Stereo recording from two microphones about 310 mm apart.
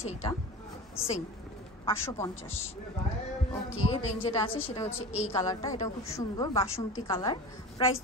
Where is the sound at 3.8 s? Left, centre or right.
Centre.